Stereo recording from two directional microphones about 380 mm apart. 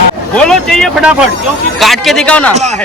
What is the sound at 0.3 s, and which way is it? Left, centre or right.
Speech, centre.